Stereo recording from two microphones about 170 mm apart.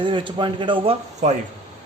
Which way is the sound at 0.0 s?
30° right (ahead or behind).